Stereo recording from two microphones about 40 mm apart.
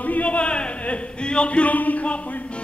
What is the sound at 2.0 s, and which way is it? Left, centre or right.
Music, left.